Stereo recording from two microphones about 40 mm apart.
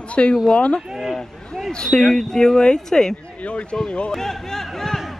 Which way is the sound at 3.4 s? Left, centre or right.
Left.